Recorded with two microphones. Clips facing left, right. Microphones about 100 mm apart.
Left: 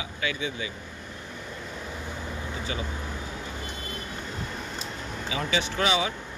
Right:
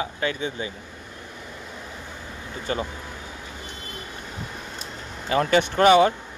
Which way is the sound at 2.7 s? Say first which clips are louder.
Right 8 dB; 50° right (ahead or behind).